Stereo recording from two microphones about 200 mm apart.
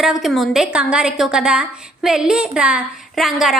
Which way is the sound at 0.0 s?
Centre (ahead or behind).